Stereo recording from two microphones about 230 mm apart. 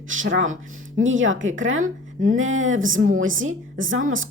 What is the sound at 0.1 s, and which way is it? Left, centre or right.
Speech, right.